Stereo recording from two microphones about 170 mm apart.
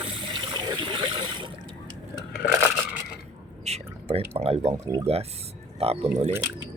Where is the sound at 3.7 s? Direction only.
35° right (ahead or behind).